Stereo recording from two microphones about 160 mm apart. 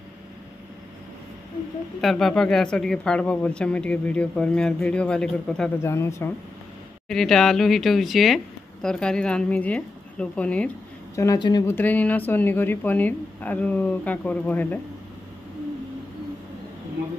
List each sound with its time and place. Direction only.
2.0 s speech: centre (ahead or behind)
5.8 s speech: 15° left (ahead or behind)
7.1 s speech: 5° left (ahead or behind)
11.1 s speech: 25° left (ahead or behind)
11.7 s speech: 10° left (ahead or behind)